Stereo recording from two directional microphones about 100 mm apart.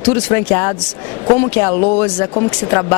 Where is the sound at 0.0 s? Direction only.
20° left (ahead or behind).